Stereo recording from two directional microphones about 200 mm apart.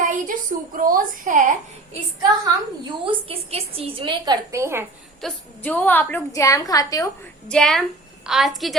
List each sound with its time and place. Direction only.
0.0 s a woman's voice: 40° right (ahead or behind)
2.2 s a woman's voice: 20° right (ahead or behind)
3.1 s a woman's voice: 30° right (ahead or behind); by 4.9 s 15° right (ahead or behind)
5.2 s a woman's voice: 10° left (ahead or behind)
7.4 s a woman's voice: 5° left (ahead or behind)